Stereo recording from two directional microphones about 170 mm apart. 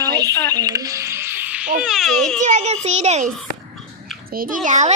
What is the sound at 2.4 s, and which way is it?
Speech, 40° right (ahead or behind).